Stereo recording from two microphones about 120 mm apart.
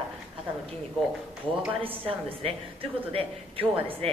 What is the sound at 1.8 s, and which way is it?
Speech, 50° right (ahead or behind).